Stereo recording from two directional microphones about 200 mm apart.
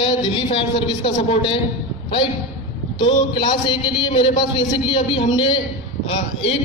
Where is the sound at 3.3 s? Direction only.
20° left (ahead or behind).